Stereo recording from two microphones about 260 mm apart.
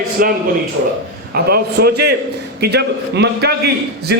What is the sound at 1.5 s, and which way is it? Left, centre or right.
A man's voice, right.